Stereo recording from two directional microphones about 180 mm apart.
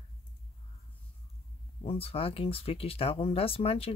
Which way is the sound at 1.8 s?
30° left (ahead or behind).